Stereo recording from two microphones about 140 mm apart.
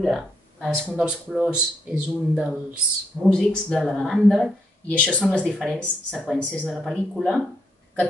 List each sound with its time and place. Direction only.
0.0 s speech: centre (ahead or behind)
3.3 s speech: 5° left (ahead or behind)